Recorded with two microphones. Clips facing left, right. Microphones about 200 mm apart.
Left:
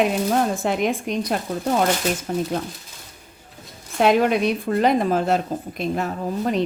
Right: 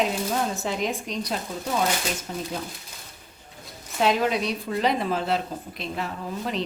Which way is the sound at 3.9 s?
55° left (ahead or behind).